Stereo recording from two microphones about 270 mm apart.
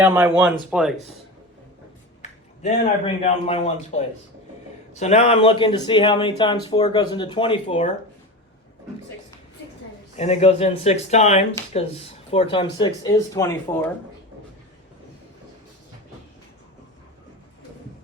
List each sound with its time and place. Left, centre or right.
0.0 s speech: centre
2.2 s a sound: left
3.2 s speech: left
10.2 s speech: left